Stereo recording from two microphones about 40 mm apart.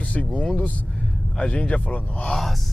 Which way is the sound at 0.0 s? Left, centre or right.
Left.